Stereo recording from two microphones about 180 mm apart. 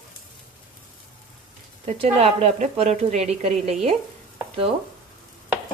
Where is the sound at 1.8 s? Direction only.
35° right (ahead or behind).